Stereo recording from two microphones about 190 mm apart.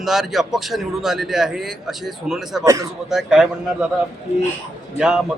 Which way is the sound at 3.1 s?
5° right (ahead or behind).